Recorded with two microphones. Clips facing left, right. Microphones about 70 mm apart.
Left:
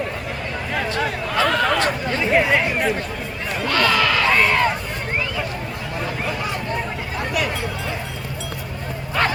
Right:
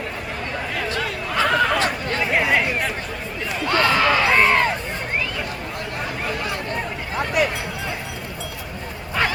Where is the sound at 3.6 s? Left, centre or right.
Right.